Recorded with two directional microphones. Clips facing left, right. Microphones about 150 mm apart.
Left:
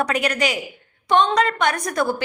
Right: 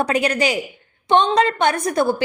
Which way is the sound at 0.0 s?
30° right (ahead or behind).